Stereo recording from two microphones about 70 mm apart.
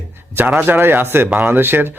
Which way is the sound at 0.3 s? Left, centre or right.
Right.